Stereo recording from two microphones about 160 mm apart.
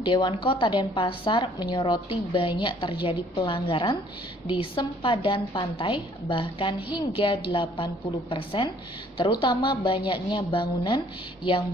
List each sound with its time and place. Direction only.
0.0 s a woman's voice: 30° left (ahead or behind)